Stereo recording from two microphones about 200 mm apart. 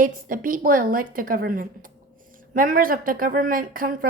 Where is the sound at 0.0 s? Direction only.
45° right (ahead or behind).